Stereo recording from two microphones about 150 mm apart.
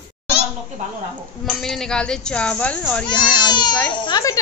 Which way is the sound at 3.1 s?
30° left (ahead or behind).